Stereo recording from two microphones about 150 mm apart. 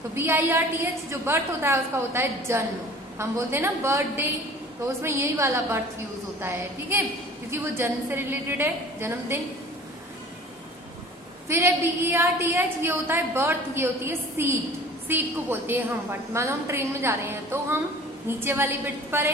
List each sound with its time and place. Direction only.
0.1 s a woman's voice: 15° right (ahead or behind)
11.4 s a woman's voice: 15° right (ahead or behind)